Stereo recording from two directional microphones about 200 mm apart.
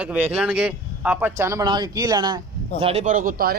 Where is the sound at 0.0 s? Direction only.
10° right (ahead or behind).